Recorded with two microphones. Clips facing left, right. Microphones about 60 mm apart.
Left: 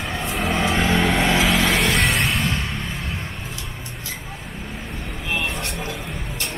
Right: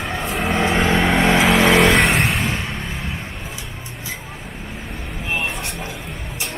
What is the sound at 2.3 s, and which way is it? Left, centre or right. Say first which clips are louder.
Vehicle: right 1 dB; centre.